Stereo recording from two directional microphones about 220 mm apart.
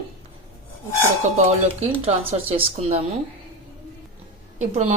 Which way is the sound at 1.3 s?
30° right (ahead or behind).